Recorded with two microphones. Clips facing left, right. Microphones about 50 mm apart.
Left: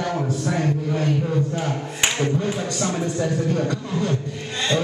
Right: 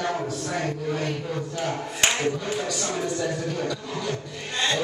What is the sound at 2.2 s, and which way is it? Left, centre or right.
Speech, left.